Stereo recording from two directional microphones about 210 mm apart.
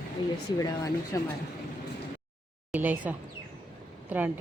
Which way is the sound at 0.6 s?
15° left (ahead or behind).